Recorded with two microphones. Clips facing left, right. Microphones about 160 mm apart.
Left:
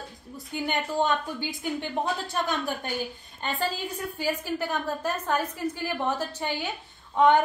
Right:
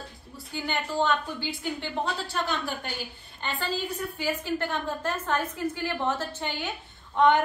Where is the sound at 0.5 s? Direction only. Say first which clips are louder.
Left 2 dB; 15° left (ahead or behind).